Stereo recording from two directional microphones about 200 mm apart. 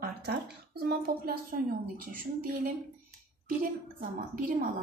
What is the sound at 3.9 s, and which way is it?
Speech, 45° right (ahead or behind).